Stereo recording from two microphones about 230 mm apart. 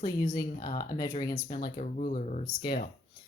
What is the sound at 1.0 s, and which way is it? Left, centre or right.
Speech, centre.